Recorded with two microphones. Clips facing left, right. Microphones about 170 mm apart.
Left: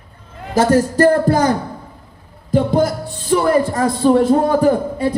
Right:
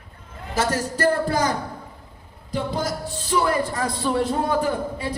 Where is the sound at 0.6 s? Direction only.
50° left (ahead or behind).